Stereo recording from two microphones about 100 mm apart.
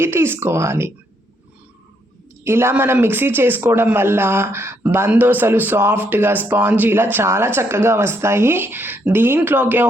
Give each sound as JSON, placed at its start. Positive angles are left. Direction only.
{"t": 0.0, "sound": "speech", "side_deg": -25}
{"t": 2.4, "sound": "speech", "side_deg": -25}